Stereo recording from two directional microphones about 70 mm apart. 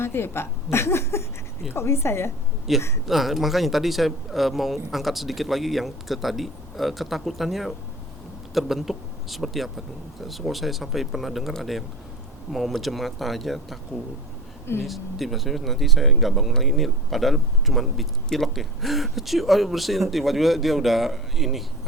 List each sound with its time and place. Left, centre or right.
0.0 s a woman's voice: left
2.7 s speech: centre
14.8 s speech: centre